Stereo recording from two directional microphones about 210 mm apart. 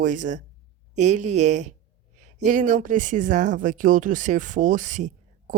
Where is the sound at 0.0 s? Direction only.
35° right (ahead or behind).